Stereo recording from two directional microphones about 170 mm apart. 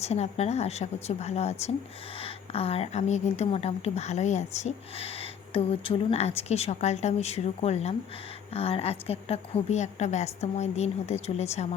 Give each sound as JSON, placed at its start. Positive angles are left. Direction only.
{"t": 0.0, "sound": "speech", "side_deg": 40}